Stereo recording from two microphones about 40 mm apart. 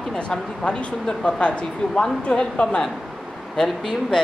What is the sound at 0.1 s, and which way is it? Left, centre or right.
Speech, left.